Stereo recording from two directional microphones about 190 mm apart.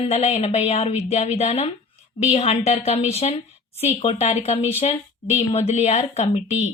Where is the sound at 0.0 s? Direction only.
35° left (ahead or behind).